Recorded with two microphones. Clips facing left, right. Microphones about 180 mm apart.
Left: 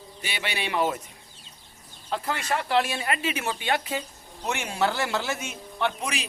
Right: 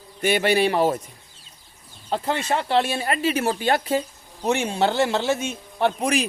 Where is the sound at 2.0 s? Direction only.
30° right (ahead or behind).